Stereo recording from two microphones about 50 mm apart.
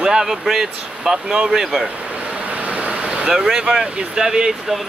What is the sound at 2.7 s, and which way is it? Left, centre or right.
Vehicle, right.